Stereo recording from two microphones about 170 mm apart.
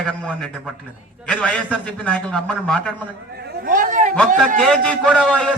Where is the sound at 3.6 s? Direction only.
50° right (ahead or behind).